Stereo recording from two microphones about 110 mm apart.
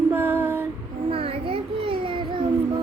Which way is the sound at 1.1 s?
60° right (ahead or behind).